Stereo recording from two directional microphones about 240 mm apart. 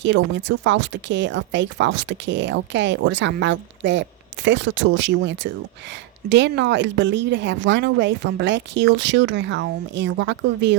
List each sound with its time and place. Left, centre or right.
0.0 s speech: right